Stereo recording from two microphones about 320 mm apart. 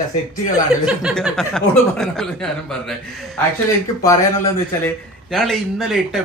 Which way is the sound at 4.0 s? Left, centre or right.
Centre.